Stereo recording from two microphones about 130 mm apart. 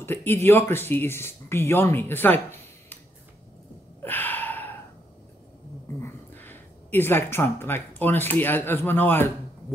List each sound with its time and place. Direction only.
0.0 s speech: 15° left (ahead or behind)
4.0 s gasp: 15° left (ahead or behind)
5.9 s speech: 15° left (ahead or behind)